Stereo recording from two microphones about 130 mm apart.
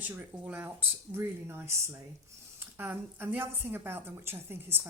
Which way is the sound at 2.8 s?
15° right (ahead or behind).